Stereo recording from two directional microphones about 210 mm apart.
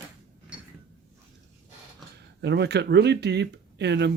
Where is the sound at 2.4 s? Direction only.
55° right (ahead or behind).